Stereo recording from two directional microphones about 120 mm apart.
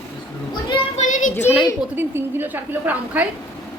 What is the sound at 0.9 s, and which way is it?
Child singing, 90° left.